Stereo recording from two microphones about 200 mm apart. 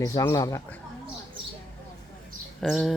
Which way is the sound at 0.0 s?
15° left (ahead or behind).